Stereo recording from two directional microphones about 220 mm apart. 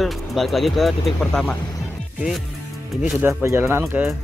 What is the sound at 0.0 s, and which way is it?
Speech, centre (ahead or behind).